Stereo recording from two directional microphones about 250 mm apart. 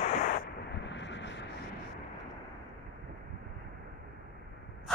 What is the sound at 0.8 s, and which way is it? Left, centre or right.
Vehicle, left.